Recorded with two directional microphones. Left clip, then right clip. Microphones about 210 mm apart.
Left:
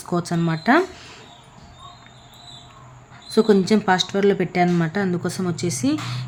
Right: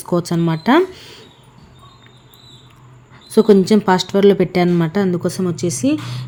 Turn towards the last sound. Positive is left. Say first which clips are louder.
# right 4 dB
turn(degrees=-10)  # may be behind; listen again after turning